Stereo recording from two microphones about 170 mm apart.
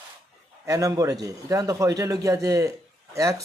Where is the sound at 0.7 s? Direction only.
20° right (ahead or behind).